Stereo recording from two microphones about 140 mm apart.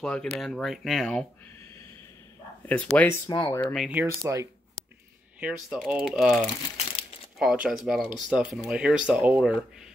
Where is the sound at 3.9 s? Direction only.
20° right (ahead or behind).